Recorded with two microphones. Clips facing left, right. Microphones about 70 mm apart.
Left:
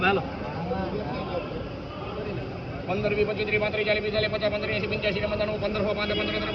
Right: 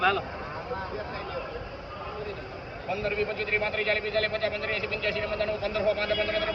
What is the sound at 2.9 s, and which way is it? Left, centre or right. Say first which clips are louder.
A man's voice: left 4 dB; right.